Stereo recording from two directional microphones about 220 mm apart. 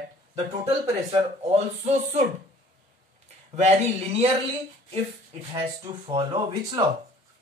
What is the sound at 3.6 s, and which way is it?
Speech, 30° right (ahead or behind).